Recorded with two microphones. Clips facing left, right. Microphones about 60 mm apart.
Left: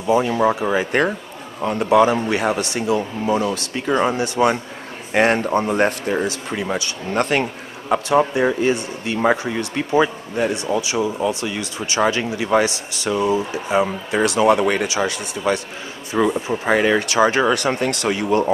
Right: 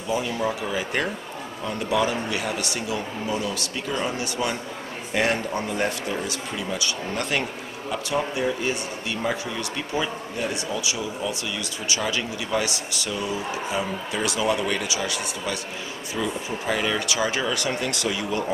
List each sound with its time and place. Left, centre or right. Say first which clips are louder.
0.1 s speech: left 9 dB; left
13.7 s speech: left 11 dB; left